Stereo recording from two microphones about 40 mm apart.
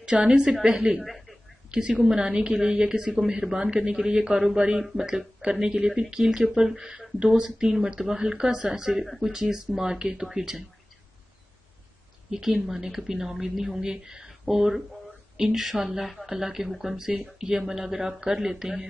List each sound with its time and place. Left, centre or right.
0.0 s a woman's voice: right
1.0 s a sound: centre
1.7 s a woman's voice: right
12.3 s a woman's voice: centre